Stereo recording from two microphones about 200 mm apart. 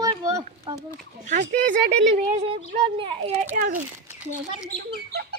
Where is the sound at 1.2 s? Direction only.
40° right (ahead or behind).